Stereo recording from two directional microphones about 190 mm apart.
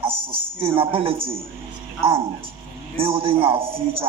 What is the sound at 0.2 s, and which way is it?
Speech, 30° right (ahead or behind).